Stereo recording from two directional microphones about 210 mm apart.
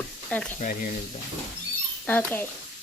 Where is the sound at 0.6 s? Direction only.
40° left (ahead or behind).